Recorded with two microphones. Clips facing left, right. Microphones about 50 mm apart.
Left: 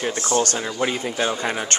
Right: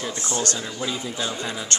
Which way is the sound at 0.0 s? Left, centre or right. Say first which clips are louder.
Left 6 dB; left.